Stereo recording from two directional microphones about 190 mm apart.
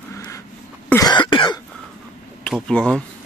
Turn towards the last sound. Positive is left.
turn(degrees=5)  # may be behind; listen again after turning